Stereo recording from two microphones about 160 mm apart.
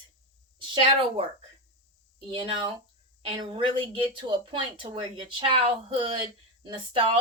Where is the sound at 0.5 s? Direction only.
35° right (ahead or behind).